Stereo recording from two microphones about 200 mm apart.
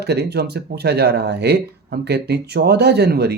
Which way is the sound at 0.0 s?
55° right (ahead or behind).